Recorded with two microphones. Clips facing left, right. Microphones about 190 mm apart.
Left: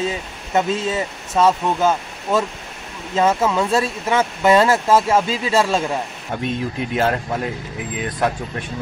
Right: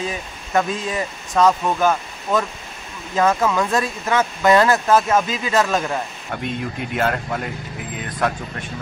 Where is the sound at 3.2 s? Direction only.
25° left (ahead or behind).